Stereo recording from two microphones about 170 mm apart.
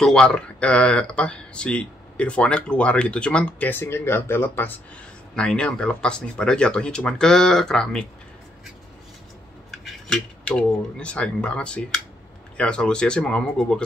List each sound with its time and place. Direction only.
0.0 s speech: 5° left (ahead or behind)
9.7 s speech: centre (ahead or behind)